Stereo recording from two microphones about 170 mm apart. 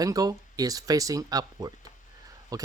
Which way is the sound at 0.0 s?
20° right (ahead or behind).